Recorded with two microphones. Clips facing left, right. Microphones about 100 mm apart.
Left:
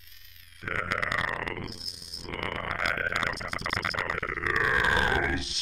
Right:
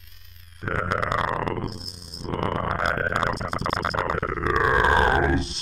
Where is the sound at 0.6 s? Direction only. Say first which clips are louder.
Right 6 dB; 35° right (ahead or behind).